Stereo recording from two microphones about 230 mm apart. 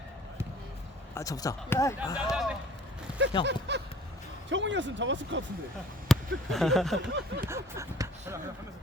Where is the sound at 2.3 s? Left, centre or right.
Centre.